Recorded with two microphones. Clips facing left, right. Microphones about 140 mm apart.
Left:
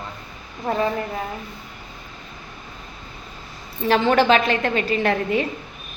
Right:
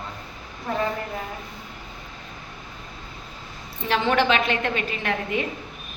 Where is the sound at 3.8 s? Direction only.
40° left (ahead or behind).